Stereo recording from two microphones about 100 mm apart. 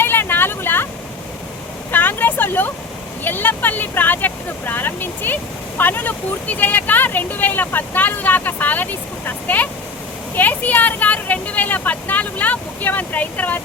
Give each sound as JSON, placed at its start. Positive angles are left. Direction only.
{"t": 0.0, "sound": "vehicle", "side_deg": 20}
{"t": 1.9, "sound": "vehicle", "side_deg": 20}
{"t": 3.2, "sound": "speech", "side_deg": 20}